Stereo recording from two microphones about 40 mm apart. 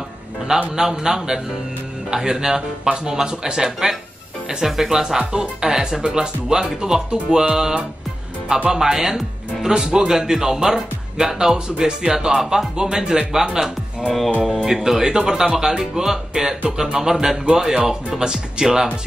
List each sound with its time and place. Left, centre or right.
0.7 s a man's voice: centre